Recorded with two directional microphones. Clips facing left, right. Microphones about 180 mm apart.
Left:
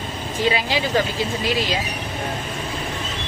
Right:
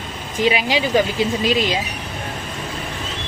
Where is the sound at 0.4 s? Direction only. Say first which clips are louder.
Right 3 dB; 15° right (ahead or behind).